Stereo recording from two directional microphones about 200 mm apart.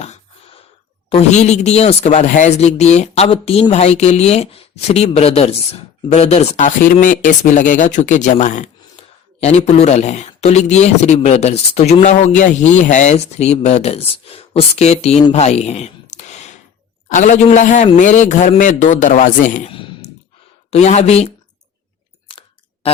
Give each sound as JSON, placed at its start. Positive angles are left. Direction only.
{"t": 1.1, "sound": "speech", "side_deg": 35}
{"t": 15.3, "sound": "a sound", "side_deg": 35}
{"t": 17.1, "sound": "speech", "side_deg": 40}
{"t": 19.7, "sound": "clicking", "side_deg": 25}
{"t": 20.7, "sound": "speech", "side_deg": 35}
{"t": 22.3, "sound": "chewing", "side_deg": 25}